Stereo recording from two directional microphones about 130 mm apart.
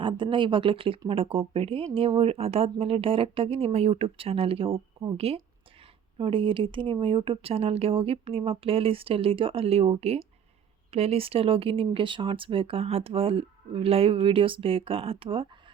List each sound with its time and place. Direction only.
0.0 s speech: 40° right (ahead or behind)